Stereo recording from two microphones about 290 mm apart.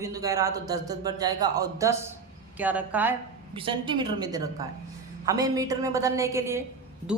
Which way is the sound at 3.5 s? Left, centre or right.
Centre.